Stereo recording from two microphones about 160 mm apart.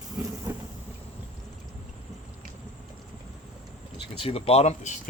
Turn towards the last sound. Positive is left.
turn(degrees=45)  # may be behind; listen again after turning